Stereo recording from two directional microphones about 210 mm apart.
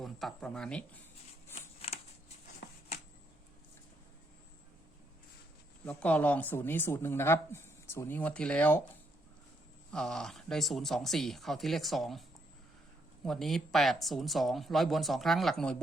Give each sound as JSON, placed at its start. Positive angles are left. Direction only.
{"t": 0.0, "sound": "speech", "side_deg": 0}
{"t": 1.5, "sound": "scissors", "side_deg": 30}
{"t": 5.8, "sound": "speech", "side_deg": 5}
{"t": 9.9, "sound": "speech", "side_deg": 0}
{"t": 13.2, "sound": "speech", "side_deg": 0}